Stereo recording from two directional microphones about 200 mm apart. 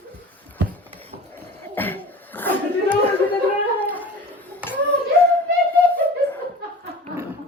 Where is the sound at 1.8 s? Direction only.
10° left (ahead or behind).